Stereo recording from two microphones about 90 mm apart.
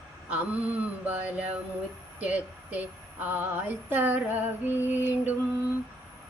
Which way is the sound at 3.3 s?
20° right (ahead or behind).